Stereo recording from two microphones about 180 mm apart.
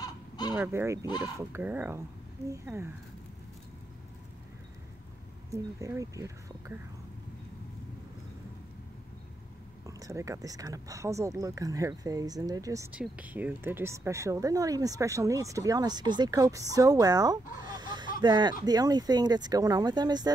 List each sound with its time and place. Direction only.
0.0 s fowl: 20° left (ahead or behind)
0.6 s speech: 15° right (ahead or behind)
5.5 s speech: 20° right (ahead or behind)
9.8 s speech: 20° right (ahead or behind)
17.6 s fowl: 25° right (ahead or behind)
18.2 s speech: 25° right (ahead or behind)